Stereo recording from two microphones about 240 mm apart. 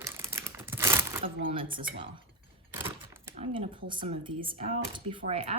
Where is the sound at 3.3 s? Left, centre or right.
Right.